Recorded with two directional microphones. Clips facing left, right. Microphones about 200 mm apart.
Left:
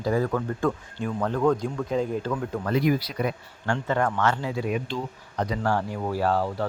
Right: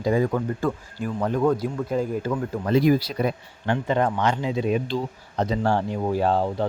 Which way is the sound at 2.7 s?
30° right (ahead or behind).